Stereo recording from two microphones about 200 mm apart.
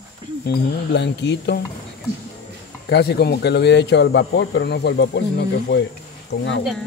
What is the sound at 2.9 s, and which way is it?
Speech, 55° left (ahead or behind).